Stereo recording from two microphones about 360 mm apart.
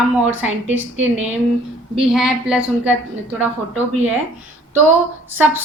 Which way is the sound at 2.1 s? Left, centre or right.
Centre.